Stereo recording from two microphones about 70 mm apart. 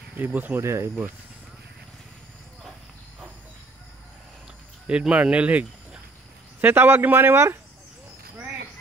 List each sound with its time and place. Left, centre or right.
0.2 s speech: right
0.6 s a man's voice: right
4.8 s speech: centre
6.6 s a man's voice: right